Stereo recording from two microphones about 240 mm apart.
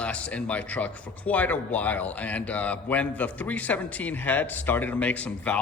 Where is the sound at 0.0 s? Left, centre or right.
Centre.